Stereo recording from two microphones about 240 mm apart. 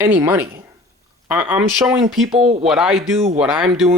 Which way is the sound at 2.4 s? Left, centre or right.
Right.